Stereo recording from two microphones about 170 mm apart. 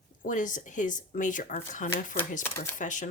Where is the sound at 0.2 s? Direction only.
50° left (ahead or behind).